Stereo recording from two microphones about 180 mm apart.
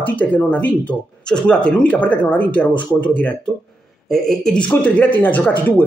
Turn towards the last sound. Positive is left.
turn(degrees=10)  # may be behind; listen again after turning